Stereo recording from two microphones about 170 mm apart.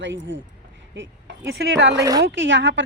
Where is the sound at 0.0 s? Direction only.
90° right.